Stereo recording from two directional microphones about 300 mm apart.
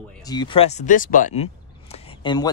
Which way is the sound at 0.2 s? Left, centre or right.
Centre.